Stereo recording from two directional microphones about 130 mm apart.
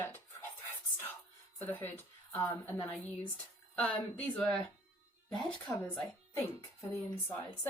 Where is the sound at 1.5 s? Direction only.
15° left (ahead or behind).